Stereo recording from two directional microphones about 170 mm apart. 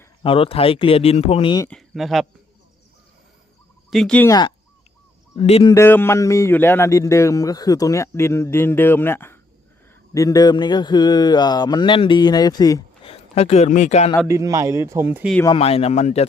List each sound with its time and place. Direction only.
0.2 s speech: 35° left (ahead or behind)
1.7 s speech: centre (ahead or behind)
3.8 s speech: centre (ahead or behind)
4.3 s a sound: 25° left (ahead or behind)
5.4 s speech: 35° left (ahead or behind)
5.7 s speech: 15° left (ahead or behind)
10.2 s a sound: 20° left (ahead or behind)
13.1 s speech: 40° left (ahead or behind)
14.3 s speech: 20° right (ahead or behind)
15.5 s speech: 35° left (ahead or behind)